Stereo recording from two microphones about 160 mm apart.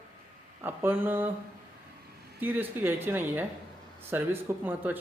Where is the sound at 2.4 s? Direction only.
10° right (ahead or behind).